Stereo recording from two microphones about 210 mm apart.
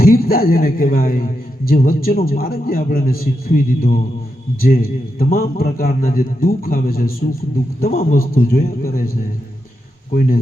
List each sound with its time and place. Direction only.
0.0 s a man's voice: 45° left (ahead or behind)